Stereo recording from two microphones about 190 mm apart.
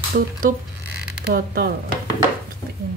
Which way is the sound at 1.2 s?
55° right (ahead or behind).